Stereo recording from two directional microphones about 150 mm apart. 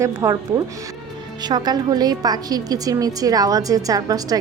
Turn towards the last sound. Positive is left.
turn(degrees=-25)  # may be behind; listen again after turning